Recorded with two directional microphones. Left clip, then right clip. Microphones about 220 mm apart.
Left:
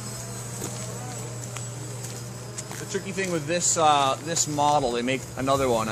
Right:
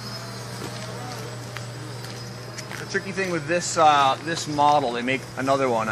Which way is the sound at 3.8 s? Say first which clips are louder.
Right 4 dB; 50° left (ahead or behind).